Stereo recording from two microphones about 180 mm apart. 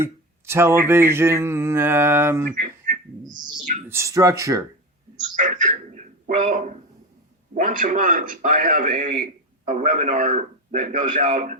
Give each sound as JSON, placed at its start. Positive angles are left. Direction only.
{"t": 0.0, "sound": "speech", "side_deg": -15}
{"t": 2.6, "sound": "a sound", "side_deg": -50}
{"t": 3.2, "sound": "a sound", "side_deg": -25}
{"t": 3.6, "sound": "a man's voice", "side_deg": -45}
{"t": 3.8, "sound": "speech", "side_deg": -15}
{"t": 5.4, "sound": "a man's voice", "side_deg": -45}